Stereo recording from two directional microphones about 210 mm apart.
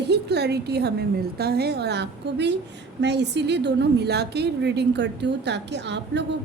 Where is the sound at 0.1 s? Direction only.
50° right (ahead or behind).